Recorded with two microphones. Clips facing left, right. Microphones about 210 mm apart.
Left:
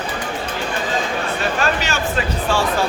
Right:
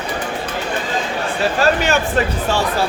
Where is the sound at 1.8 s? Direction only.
55° right (ahead or behind).